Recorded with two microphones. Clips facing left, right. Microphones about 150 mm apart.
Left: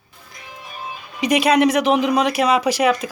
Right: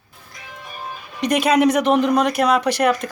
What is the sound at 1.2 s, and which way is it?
Speech, centre (ahead or behind).